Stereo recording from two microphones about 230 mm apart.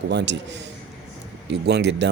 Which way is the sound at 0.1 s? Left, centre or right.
Right.